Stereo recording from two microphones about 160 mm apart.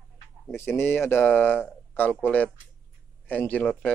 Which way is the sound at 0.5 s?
15° left (ahead or behind).